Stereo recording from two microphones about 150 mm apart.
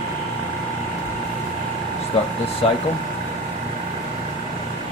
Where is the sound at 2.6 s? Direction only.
40° left (ahead or behind).